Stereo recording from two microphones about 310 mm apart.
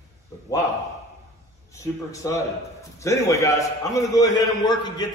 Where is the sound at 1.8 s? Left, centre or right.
Centre.